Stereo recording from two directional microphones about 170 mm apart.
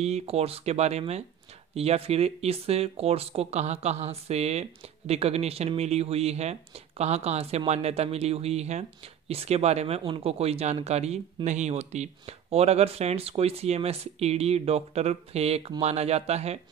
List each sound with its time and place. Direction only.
0.0 s speech: 40° right (ahead or behind)